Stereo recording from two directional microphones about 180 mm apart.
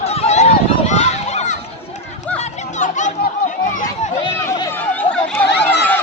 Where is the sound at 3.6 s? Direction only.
45° left (ahead or behind).